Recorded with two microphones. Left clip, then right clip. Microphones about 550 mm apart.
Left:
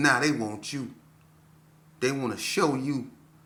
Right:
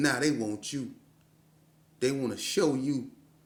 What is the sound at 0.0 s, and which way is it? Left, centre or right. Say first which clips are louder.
Speech: left 4 dB; right.